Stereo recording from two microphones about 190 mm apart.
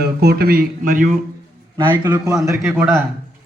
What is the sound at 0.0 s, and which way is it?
Speech, 55° right (ahead or behind).